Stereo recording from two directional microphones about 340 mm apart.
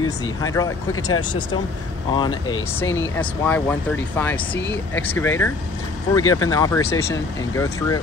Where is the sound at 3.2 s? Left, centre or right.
Centre.